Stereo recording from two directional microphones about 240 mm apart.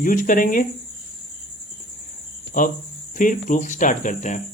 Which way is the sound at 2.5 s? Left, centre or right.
Left.